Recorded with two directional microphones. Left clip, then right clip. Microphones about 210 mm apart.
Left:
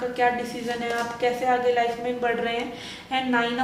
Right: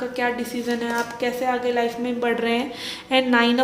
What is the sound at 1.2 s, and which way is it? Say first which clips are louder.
A woman's voice: left 3 dB; 50° right (ahead or behind).